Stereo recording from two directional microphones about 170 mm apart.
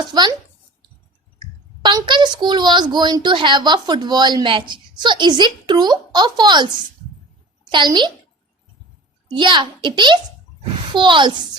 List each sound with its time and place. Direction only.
0.1 s a child's voice: 25° right (ahead or behind)
1.8 s a child's voice: 25° right (ahead or behind)
7.7 s a child's voice: 25° right (ahead or behind)
9.3 s a child's voice: 30° right (ahead or behind)